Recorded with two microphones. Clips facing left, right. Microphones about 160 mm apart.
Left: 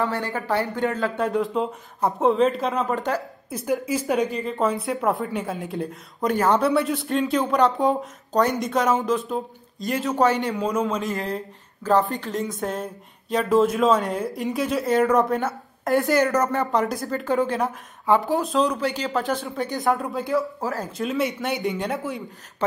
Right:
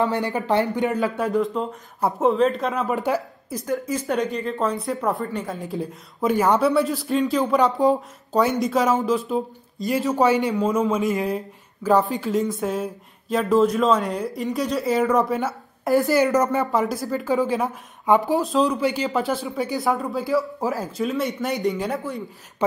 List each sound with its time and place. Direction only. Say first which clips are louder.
0.0 s speech: right 3 dB; 20° right (ahead or behind)
1.0 s speech: right 1 dB; centre (ahead or behind)
2.9 s speech: right 2 dB; 10° right (ahead or behind)
3.6 s speech: left 1 dB; 10° left (ahead or behind)